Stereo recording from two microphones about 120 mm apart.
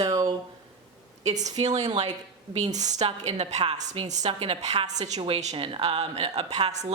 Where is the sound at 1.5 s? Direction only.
70° right (ahead or behind).